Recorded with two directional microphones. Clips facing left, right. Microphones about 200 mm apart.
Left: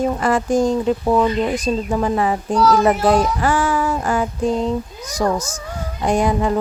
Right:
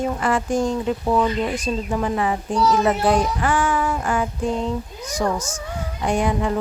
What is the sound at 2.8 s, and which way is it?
Child singing, 40° left (ahead or behind).